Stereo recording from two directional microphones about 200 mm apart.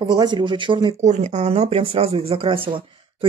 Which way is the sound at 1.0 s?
35° right (ahead or behind).